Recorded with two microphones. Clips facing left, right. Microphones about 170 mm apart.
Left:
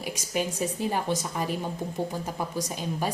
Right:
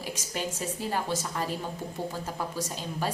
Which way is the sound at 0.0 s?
15° left (ahead or behind).